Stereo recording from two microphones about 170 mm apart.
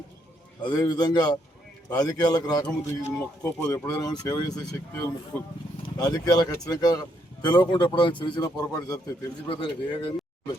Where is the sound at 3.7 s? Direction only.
20° left (ahead or behind).